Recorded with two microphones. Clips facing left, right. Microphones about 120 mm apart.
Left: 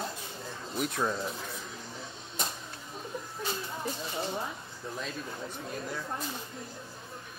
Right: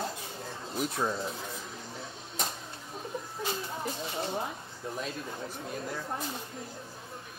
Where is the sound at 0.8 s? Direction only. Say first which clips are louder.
Even; 10° right (ahead or behind).